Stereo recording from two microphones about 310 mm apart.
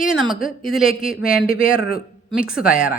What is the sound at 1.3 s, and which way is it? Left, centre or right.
Speech, left.